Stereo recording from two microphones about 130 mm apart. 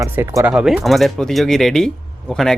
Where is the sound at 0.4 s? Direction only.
5° right (ahead or behind).